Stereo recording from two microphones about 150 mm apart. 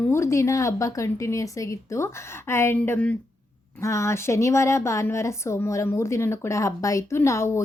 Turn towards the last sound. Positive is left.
turn(degrees=20)  # may be behind; listen again after turning